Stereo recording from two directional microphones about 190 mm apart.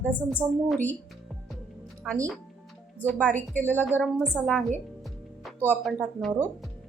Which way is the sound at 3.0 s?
5° left (ahead or behind).